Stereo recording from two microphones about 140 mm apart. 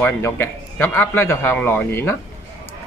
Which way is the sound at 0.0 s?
15° left (ahead or behind).